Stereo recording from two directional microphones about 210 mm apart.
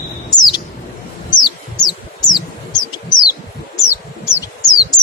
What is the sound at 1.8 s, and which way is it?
Bird, 20° left (ahead or behind).